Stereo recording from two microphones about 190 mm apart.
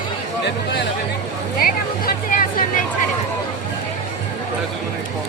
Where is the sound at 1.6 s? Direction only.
50° left (ahead or behind).